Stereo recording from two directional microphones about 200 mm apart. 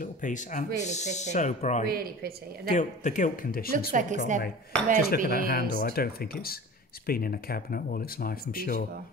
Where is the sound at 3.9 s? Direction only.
40° right (ahead or behind).